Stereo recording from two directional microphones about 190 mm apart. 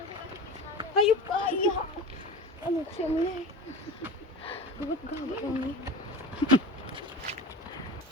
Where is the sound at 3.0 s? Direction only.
35° left (ahead or behind).